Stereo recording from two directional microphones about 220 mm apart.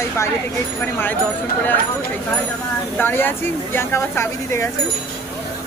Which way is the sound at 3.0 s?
10° left (ahead or behind).